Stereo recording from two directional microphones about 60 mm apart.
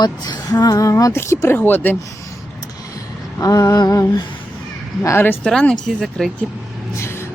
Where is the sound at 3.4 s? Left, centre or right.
Left.